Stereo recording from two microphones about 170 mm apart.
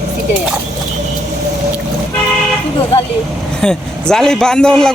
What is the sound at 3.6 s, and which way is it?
A man's voice, 5° left (ahead or behind).